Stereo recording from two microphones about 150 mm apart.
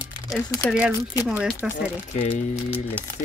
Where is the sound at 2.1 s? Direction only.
55° left (ahead or behind).